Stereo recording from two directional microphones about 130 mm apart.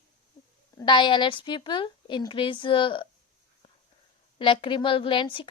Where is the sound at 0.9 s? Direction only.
40° left (ahead or behind).